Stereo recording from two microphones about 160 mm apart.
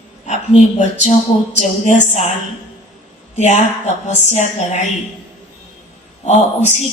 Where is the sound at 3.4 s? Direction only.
45° left (ahead or behind).